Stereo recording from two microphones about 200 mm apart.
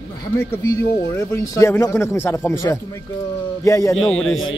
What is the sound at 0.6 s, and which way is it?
Speech, 15° left (ahead or behind).